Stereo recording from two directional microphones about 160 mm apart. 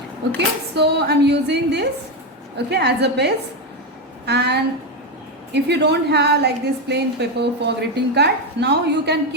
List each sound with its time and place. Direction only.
0.3 s a woman's voice: 90° right
5.6 s a woman's voice: 90° right